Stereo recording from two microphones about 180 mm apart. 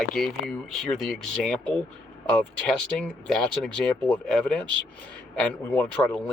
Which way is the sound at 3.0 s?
5° left (ahead or behind).